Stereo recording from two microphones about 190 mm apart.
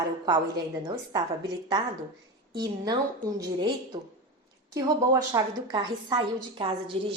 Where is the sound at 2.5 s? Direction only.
20° right (ahead or behind).